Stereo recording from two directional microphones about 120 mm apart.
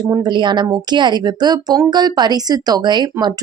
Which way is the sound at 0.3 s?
40° right (ahead or behind).